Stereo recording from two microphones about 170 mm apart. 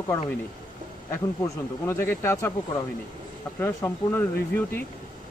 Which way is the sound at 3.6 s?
15° left (ahead or behind).